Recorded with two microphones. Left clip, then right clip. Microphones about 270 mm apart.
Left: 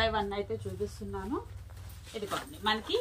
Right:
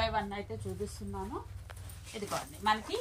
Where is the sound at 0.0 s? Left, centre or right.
Right.